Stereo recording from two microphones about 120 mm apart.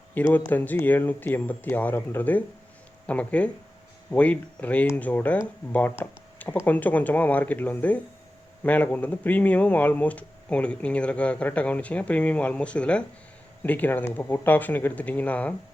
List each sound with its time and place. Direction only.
0.1 s speech: 15° left (ahead or behind)